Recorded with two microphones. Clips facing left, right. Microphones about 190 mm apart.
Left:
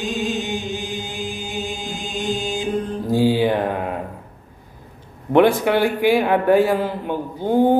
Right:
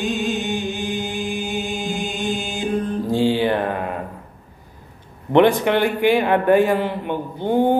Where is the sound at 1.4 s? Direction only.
60° right (ahead or behind).